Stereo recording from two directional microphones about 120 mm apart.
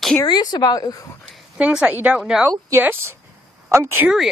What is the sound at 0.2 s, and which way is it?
Speech, 35° left (ahead or behind).